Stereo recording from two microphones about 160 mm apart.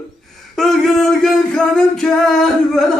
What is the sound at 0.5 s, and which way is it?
Singing, 5° left (ahead or behind).